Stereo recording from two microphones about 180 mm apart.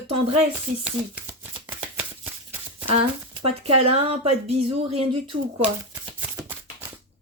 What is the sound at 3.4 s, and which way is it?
Speech, 35° right (ahead or behind).